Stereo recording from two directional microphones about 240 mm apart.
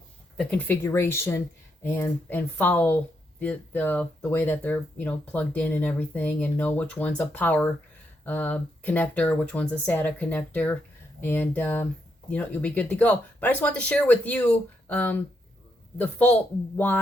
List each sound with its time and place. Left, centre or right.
0.5 s speech: centre